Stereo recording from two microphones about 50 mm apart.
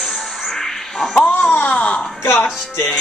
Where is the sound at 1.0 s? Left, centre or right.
Centre.